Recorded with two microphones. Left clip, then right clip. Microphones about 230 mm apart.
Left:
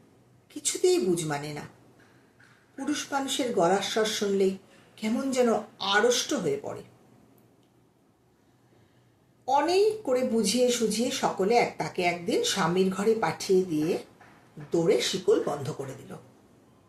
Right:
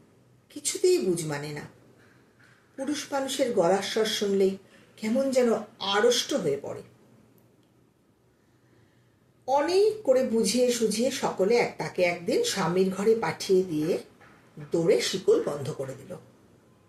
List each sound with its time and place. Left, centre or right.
0.5 s a woman's voice: centre
2.7 s speech: centre
9.5 s speech: centre